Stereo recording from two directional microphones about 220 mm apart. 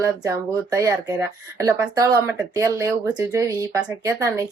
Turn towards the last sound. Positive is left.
turn(degrees=-15)  # may be behind; listen again after turning